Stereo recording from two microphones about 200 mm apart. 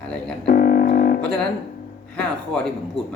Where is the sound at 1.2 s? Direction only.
5° left (ahead or behind).